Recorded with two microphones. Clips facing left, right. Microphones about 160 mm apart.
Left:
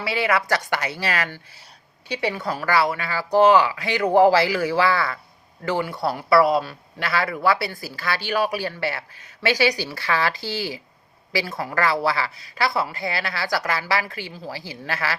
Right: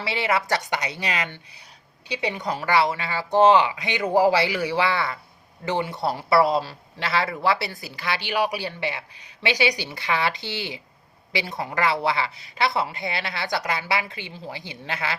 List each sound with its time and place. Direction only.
0.0 s speech: 25° right (ahead or behind)